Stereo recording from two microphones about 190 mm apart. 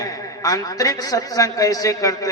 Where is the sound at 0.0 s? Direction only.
15° left (ahead or behind).